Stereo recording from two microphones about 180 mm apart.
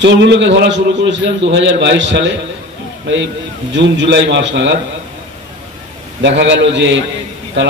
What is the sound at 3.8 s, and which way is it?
Speech, 90° right.